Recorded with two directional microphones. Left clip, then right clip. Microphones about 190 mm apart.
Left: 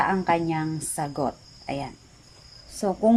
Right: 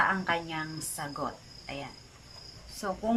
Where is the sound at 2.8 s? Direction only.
30° left (ahead or behind).